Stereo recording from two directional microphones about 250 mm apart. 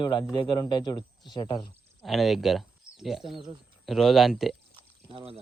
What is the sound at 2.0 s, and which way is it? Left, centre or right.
Speech, centre.